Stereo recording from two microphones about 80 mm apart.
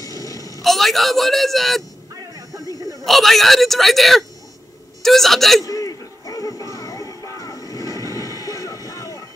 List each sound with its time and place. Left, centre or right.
0.0 s a sound: left
0.6 s a man's voice: centre
2.6 s speech: left
3.0 s a man's voice: centre
5.6 s music: left
7.9 s train: left
8.3 s vehicle: right
8.5 s vehicle: left